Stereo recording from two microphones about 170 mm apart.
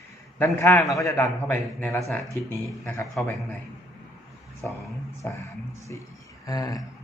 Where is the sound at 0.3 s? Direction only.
15° left (ahead or behind).